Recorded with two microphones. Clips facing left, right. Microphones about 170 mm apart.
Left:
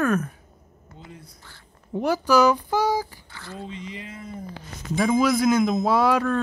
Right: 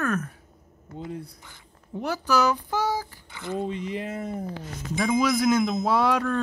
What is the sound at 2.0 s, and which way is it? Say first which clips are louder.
Speech: left 5 dB; 10° left (ahead or behind).